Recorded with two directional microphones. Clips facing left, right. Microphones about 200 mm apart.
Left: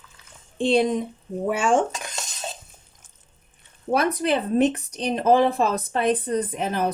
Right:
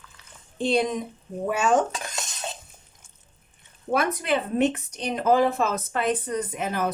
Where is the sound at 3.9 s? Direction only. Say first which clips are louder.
Left 2 dB; 35° left (ahead or behind).